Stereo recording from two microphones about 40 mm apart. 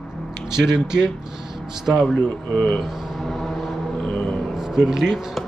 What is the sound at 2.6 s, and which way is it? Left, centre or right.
Speech, left.